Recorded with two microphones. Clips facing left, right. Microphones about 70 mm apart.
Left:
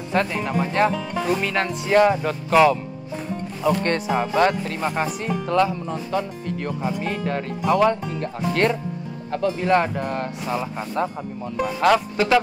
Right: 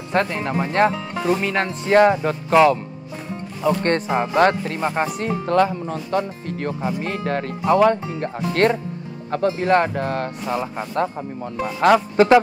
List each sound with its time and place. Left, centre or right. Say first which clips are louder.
0.1 s speech: right 1 dB; right
1.3 s speech: right 2 dB; right
4.1 s speech: right 2 dB; right
5.2 s speech: right 2 dB; right
6.8 s speech: even; right
7.1 s speech: right 1 dB; right
7.6 s speech: right 3 dB; right
10.4 s speech: right 2 dB; right